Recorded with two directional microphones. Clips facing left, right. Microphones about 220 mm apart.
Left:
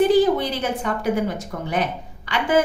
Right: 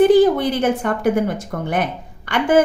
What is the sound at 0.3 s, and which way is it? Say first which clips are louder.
Speech: right 6 dB; 55° right (ahead or behind).